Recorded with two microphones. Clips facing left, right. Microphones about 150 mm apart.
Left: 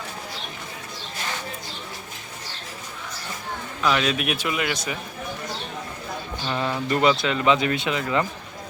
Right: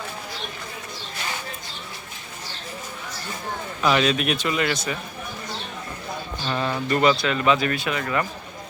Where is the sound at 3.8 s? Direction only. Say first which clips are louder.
Right 2 dB; centre (ahead or behind).